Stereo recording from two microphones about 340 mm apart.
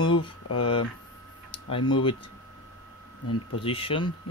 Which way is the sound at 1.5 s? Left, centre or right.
Centre.